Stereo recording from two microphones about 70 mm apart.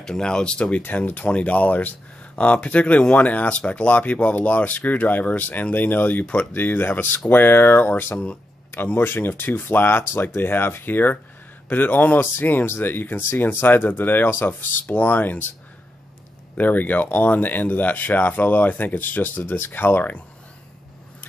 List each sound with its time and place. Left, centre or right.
0.0 s speech: centre; by 15.4 s left
16.5 s speech: left